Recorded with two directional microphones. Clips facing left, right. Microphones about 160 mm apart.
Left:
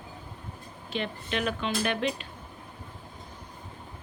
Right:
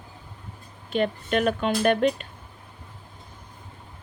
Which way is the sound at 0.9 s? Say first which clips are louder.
Right 8 dB; 50° right (ahead or behind).